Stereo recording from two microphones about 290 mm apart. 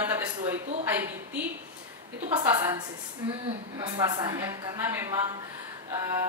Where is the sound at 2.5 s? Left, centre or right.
Centre.